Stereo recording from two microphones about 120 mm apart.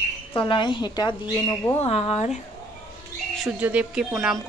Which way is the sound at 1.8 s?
55° left (ahead or behind).